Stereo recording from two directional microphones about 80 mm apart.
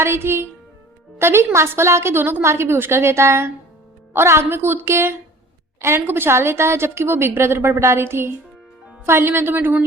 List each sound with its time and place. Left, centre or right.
0.0 s a woman's voice: right